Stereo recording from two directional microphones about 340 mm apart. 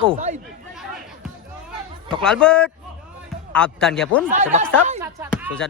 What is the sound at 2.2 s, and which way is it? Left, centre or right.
Speech, centre.